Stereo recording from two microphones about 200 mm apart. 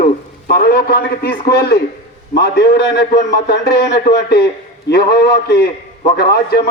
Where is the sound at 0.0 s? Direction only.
50° left (ahead or behind).